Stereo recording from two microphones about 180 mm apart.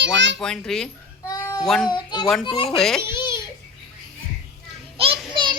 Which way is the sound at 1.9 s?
25° left (ahead or behind).